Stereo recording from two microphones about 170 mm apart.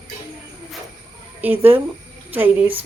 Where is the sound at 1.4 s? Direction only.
10° right (ahead or behind).